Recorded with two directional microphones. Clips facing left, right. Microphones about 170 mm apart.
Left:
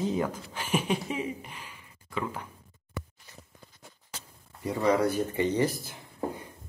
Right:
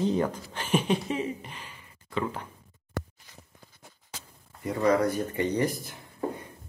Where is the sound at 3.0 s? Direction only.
90° right.